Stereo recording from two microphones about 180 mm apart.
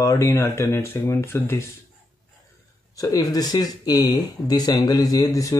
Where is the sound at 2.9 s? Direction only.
20° left (ahead or behind).